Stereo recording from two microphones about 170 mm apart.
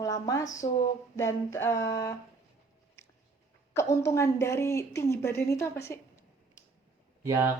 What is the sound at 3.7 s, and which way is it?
A woman's voice, 15° left (ahead or behind).